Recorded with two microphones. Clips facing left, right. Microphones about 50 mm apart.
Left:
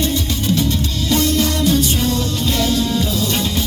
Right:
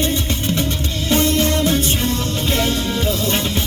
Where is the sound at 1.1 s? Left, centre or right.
Right.